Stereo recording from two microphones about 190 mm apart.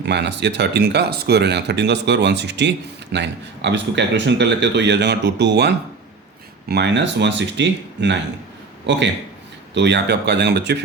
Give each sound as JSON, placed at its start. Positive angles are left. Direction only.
{"t": 0.0, "sound": "speech", "side_deg": -65}